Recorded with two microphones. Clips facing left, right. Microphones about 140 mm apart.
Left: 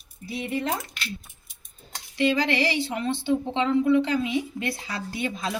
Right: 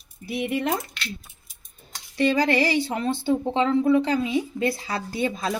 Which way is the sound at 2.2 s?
45° right (ahead or behind).